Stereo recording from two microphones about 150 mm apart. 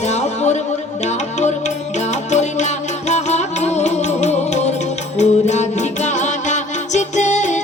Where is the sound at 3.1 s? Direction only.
50° left (ahead or behind).